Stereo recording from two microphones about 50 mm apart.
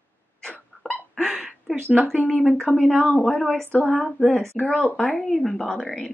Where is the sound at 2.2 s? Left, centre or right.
Centre.